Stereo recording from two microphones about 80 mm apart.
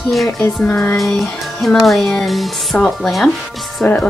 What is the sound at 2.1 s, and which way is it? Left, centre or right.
Speech, centre.